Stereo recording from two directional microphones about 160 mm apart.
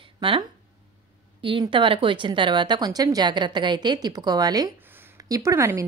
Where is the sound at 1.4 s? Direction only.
30° right (ahead or behind).